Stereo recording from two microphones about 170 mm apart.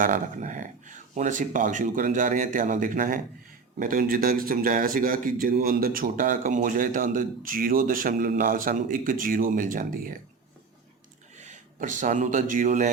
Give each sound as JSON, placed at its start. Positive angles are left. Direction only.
{"t": 0.0, "sound": "a man's voice", "side_deg": -45}
{"t": 11.3, "sound": "a man's voice", "side_deg": -45}